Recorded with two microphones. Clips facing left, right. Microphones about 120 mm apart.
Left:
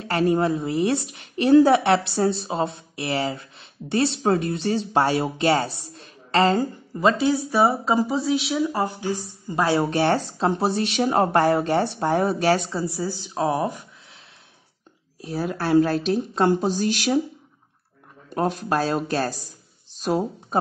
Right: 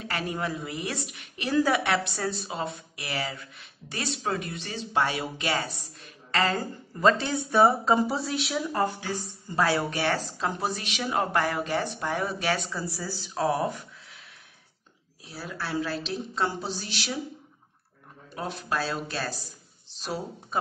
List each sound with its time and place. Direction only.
0.0 s a woman's voice: 35° left (ahead or behind)
7.0 s speech: 10° left (ahead or behind)
8.6 s a woman's voice: 15° left (ahead or behind); by 12.8 s 35° left (ahead or behind)
12.8 s speech: 20° left (ahead or behind)
15.2 s speech: 50° left (ahead or behind)
18.3 s speech: 45° left (ahead or behind)